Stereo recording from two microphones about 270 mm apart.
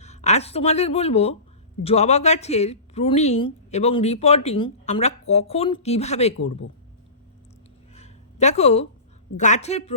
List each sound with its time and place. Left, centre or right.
0.0 s a woman's voice: left
7.9 s a sound: left
9.4 s a woman's voice: left